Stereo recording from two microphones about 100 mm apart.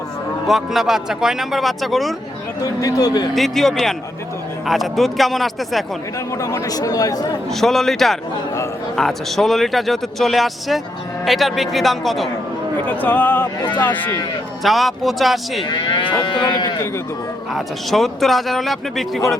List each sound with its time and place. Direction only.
0.4 s a man's voice: centre (ahead or behind)
2.8 s speech: 40° left (ahead or behind)
3.3 s a man's voice: centre (ahead or behind)
6.3 s speech: 35° left (ahead or behind)
7.5 s a man's voice: 5° left (ahead or behind)
12.9 s speech: 15° left (ahead or behind)
14.6 s a man's voice: centre (ahead or behind)
15.6 s livestock: 50° left (ahead or behind)
17.5 s a man's voice: centre (ahead or behind)